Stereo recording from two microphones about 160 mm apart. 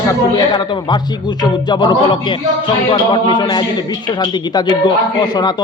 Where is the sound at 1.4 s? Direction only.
30° left (ahead or behind).